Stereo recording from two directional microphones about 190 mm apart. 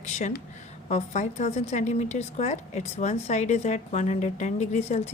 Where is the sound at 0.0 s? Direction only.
40° left (ahead or behind).